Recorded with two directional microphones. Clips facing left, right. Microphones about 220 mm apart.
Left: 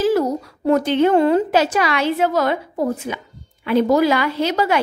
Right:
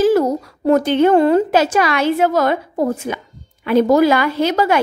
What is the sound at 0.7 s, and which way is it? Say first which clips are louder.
A woman's voice: right 3 dB; 50° right (ahead or behind).